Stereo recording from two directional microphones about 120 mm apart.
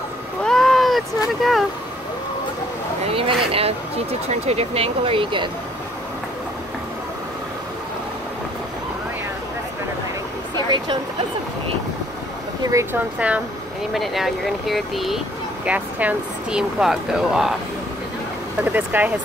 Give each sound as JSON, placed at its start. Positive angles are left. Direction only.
{"t": 0.4, "sound": "a sound", "side_deg": 5}
{"t": 3.1, "sound": "vehicle", "side_deg": -50}
{"t": 4.3, "sound": "speech", "side_deg": -60}
{"t": 12.9, "sound": "speech", "side_deg": -10}
{"t": 13.9, "sound": "speech", "side_deg": 0}
{"t": 18.6, "sound": "speech", "side_deg": -15}